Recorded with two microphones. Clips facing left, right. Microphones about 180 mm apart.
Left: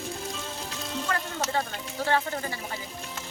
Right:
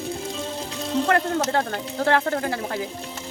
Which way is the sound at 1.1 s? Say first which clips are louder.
Right 7 dB; 65° right (ahead or behind).